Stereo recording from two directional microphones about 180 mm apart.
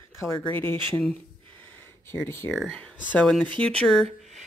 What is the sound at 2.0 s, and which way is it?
Speech, 15° left (ahead or behind).